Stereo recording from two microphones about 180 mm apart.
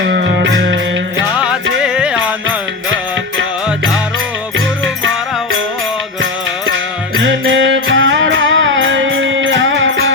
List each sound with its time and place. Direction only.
0.0 s music: 70° right (ahead or behind)
1.8 s music: 5° right (ahead or behind)
7.2 s music: 90° right